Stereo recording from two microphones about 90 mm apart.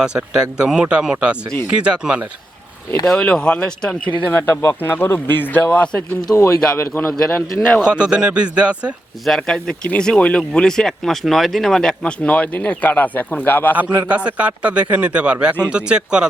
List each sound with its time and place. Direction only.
0.0 s a man's voice: 10° right (ahead or behind)
3.1 s speech: 10° left (ahead or behind)
4.3 s speech: 30° left (ahead or behind); by 6.3 s 10° left (ahead or behind)
6.3 s speech: 30° left (ahead or behind)
6.7 s speech: 20° left (ahead or behind)
7.8 s a man's voice: 10° right (ahead or behind)
9.2 s speech: 5° left (ahead or behind); by 13.7 s 20° left (ahead or behind)
14.1 s a man's voice: 15° right (ahead or behind)